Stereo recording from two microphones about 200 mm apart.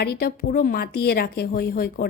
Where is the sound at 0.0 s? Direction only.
50° left (ahead or behind).